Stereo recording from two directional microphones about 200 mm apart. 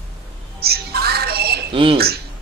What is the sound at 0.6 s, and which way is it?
Music, 50° right (ahead or behind).